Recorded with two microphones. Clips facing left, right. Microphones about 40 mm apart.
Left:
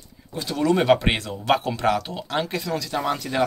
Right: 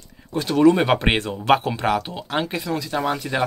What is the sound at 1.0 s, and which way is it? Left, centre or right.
Speech, right.